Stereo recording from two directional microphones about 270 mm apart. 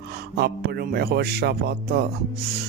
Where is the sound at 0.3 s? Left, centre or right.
Right.